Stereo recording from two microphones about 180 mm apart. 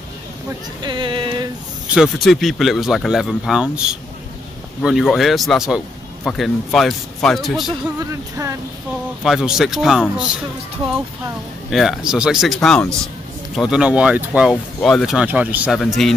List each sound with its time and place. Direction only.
0.8 s a sound: 25° right (ahead or behind)
2.0 s speech: centre (ahead or behind)
8.1 s speech: 15° right (ahead or behind)
9.2 s speech: centre (ahead or behind)
11.7 s speech: centre (ahead or behind)